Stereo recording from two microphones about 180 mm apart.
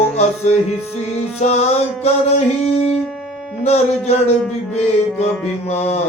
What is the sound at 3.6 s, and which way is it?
Music, 35° left (ahead or behind).